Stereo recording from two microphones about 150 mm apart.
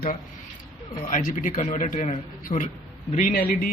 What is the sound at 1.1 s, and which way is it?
Speech, 65° left (ahead or behind).